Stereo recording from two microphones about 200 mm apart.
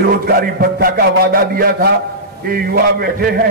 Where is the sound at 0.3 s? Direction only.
50° right (ahead or behind).